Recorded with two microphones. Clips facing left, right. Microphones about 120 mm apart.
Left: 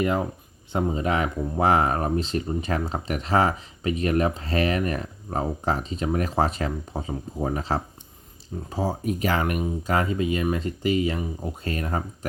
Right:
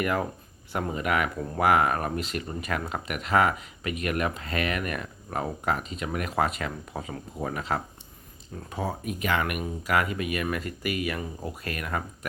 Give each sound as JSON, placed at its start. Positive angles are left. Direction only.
{"t": 0.0, "sound": "speech", "side_deg": 25}